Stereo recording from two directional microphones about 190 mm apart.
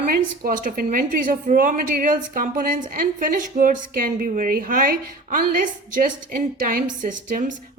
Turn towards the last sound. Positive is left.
turn(degrees=-40)  # may be behind; listen again after turning